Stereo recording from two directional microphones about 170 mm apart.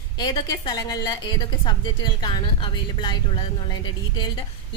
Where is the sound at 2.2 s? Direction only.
25° left (ahead or behind).